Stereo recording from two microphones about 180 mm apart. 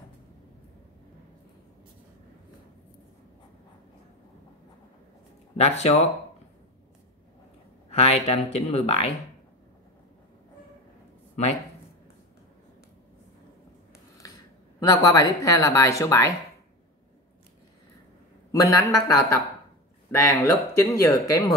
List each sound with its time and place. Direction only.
5.6 s speech: 35° left (ahead or behind)
7.9 s speech: 35° left (ahead or behind)
14.8 s speech: 20° left (ahead or behind)
18.5 s speech: 20° left (ahead or behind)